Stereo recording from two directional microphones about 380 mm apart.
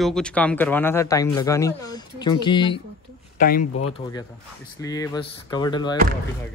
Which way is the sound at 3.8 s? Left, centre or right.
Centre.